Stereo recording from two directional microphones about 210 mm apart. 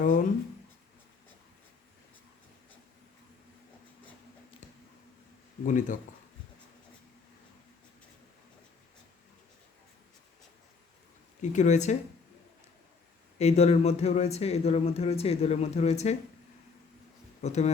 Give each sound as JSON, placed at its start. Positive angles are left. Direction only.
{"t": 0.0, "sound": "speech", "side_deg": 40}
{"t": 5.6, "sound": "speech", "side_deg": 35}
{"t": 11.5, "sound": "speech", "side_deg": 35}
{"t": 13.4, "sound": "speech", "side_deg": 30}
{"t": 17.4, "sound": "speech", "side_deg": 30}